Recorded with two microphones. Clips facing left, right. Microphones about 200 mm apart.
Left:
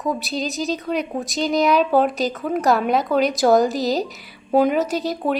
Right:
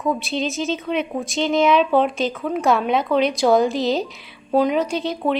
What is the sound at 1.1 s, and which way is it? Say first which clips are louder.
A woman's voice: right 1 dB; 5° left (ahead or behind).